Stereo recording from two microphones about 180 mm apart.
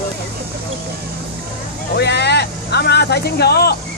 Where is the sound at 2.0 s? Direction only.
70° left (ahead or behind).